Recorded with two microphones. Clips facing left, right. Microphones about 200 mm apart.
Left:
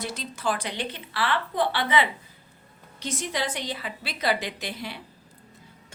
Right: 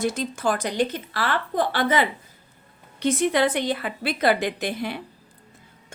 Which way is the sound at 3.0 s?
60° right (ahead or behind).